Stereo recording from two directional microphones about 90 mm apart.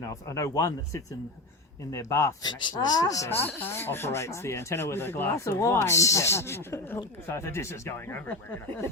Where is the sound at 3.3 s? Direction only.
25° left (ahead or behind).